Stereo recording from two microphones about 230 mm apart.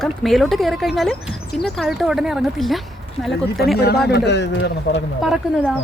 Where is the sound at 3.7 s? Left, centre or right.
Left.